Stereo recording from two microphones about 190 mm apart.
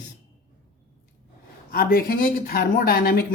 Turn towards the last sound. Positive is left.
turn(degrees=50)  # may be behind; listen again after turning